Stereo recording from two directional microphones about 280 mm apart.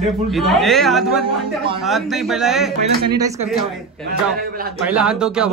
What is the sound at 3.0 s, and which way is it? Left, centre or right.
Speech, centre.